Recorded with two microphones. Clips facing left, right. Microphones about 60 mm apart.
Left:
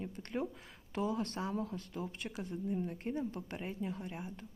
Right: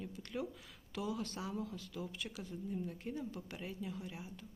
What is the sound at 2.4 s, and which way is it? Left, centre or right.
Speech, left.